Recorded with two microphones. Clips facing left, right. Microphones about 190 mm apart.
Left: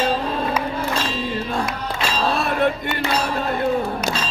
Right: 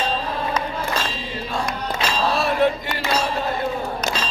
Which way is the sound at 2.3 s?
55° left (ahead or behind).